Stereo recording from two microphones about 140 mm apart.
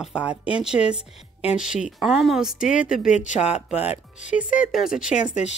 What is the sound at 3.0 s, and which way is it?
Speech, 60° left (ahead or behind).